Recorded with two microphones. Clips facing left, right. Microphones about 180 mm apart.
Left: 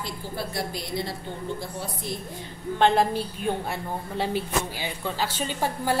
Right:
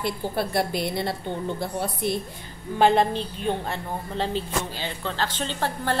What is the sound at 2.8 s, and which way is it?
Speech, 5° right (ahead or behind).